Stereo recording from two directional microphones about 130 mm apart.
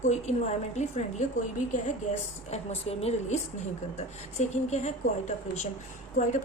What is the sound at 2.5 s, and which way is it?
A woman's voice, 50° left (ahead or behind).